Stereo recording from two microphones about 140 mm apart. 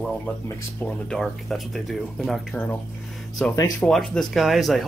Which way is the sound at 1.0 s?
Centre (ahead or behind).